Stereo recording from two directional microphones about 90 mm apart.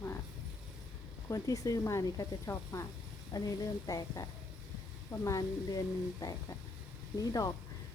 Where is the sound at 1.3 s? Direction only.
40° left (ahead or behind).